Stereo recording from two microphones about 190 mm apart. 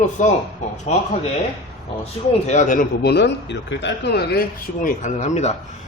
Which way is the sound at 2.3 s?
35° left (ahead or behind).